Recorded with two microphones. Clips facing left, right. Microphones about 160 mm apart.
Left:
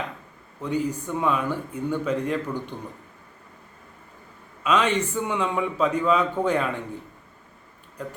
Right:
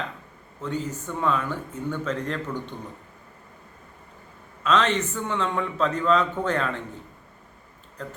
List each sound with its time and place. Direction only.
0.6 s a man's voice: 10° left (ahead or behind)
4.6 s a man's voice: 10° left (ahead or behind)
8.0 s a man's voice: 10° left (ahead or behind)